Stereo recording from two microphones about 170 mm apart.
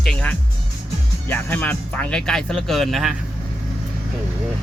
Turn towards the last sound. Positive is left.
turn(degrees=0)  # may be behind; listen again after turning